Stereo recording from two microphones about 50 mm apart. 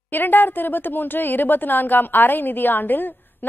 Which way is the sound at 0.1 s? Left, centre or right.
Left.